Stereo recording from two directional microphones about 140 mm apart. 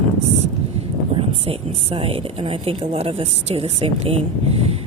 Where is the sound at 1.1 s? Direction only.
45° right (ahead or behind).